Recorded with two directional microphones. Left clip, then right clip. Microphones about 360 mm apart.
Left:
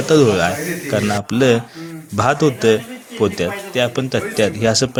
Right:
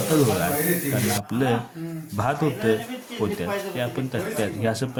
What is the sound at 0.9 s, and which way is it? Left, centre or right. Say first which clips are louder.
Speech: left 8 dB; right.